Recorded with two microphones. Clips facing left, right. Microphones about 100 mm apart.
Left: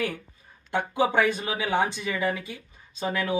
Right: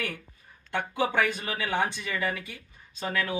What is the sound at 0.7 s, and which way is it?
Speech, 15° left (ahead or behind).